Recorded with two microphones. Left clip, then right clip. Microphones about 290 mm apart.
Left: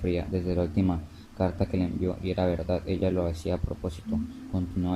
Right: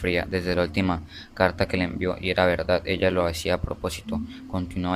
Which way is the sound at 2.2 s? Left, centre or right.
Right.